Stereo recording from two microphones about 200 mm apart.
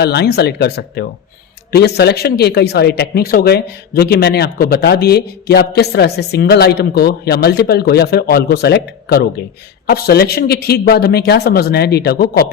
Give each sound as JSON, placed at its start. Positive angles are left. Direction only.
{"t": 0.0, "sound": "speech", "side_deg": 55}